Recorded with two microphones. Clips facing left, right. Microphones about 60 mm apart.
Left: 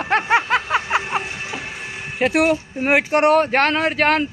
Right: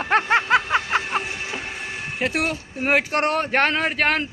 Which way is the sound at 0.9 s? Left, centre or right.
Centre.